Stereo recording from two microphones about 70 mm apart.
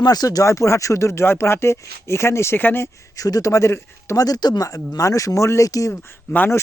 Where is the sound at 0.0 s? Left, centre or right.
Left.